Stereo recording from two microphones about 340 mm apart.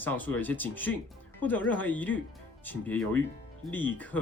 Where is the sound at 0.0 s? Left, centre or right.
Centre.